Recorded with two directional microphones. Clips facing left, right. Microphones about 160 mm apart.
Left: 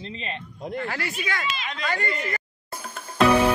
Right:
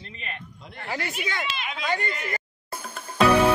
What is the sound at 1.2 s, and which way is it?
Speech, 25° right (ahead or behind).